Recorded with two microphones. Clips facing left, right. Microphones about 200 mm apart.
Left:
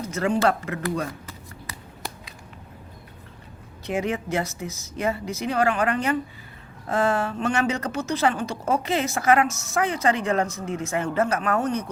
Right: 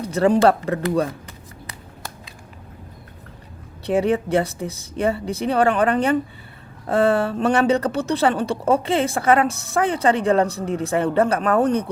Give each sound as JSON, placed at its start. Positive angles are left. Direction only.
{"t": 0.0, "sound": "speech", "side_deg": -35}
{"t": 3.8, "sound": "speech", "side_deg": -35}